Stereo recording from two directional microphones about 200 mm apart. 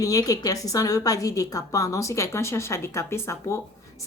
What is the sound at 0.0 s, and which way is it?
A woman's voice, 15° left (ahead or behind).